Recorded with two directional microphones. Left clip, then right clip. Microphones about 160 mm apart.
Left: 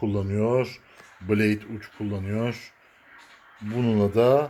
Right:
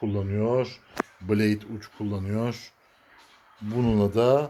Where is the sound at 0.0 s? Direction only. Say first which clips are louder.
Left 2 dB; 20° left (ahead or behind).